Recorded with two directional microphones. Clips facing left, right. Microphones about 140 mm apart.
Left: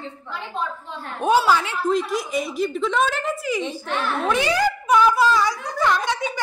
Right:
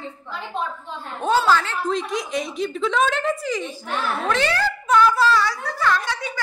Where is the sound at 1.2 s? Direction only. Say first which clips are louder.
Left 1 dB; 15° left (ahead or behind).